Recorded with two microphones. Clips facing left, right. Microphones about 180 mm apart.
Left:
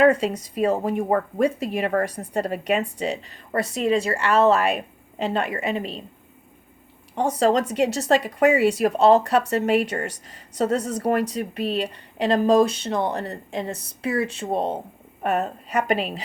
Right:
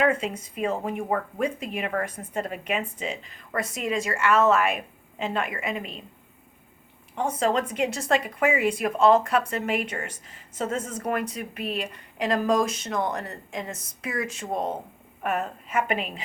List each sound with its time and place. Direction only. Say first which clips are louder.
0.0 s speech: left 6 dB; 35° left (ahead or behind)
7.2 s speech: left 5 dB; 35° left (ahead or behind)